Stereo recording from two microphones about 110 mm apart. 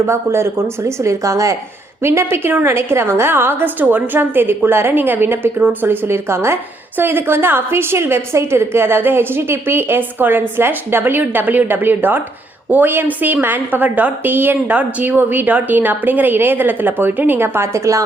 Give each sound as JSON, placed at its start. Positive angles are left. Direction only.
{"t": 0.0, "sound": "a woman's voice", "side_deg": -25}